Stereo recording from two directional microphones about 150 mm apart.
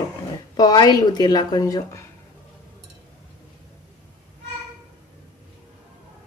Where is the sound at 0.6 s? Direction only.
25° left (ahead or behind).